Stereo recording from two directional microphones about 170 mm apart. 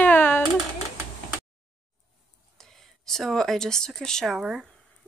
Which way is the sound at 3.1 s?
Centre (ahead or behind).